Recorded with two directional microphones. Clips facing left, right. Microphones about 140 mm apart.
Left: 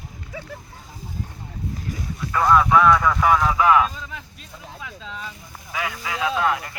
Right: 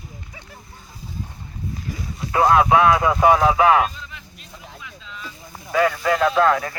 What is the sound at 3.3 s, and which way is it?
Speech, 90° right.